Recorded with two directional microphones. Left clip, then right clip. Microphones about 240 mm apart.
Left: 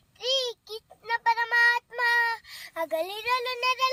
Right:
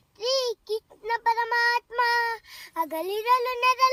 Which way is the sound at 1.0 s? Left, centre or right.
Centre.